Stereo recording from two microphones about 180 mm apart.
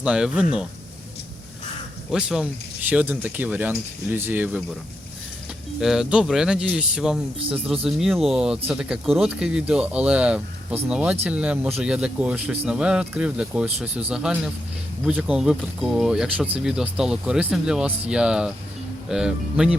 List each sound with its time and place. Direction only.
0.0 s speech: 5° right (ahead or behind)
2.0 s speech: 5° right (ahead or behind)
5.8 s speech: centre (ahead or behind)
13.7 s speech: 35° right (ahead or behind)
14.1 s speech: 5° right (ahead or behind)